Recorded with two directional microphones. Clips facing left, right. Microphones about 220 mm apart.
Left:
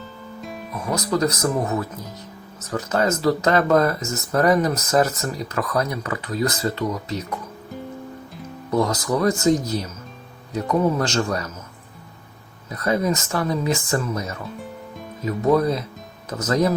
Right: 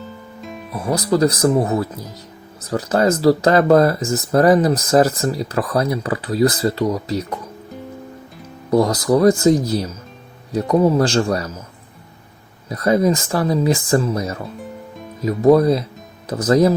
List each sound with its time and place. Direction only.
0.7 s speech: 35° right (ahead or behind)
8.7 s speech: 35° right (ahead or behind)
12.6 s speech: 35° right (ahead or behind)